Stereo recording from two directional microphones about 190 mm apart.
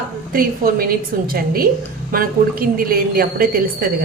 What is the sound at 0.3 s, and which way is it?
A woman's voice, 50° right (ahead or behind).